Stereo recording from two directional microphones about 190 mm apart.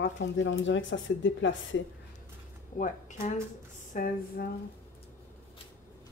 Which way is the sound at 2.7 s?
40° left (ahead or behind).